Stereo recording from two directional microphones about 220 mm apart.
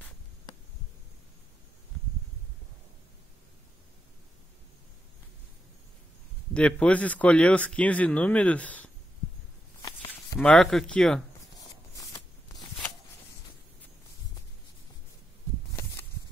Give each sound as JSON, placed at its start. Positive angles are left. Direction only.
{"t": 6.5, "sound": "speech", "side_deg": 5}
{"t": 9.8, "sound": "a sound", "side_deg": 15}
{"t": 10.3, "sound": "speech", "side_deg": 5}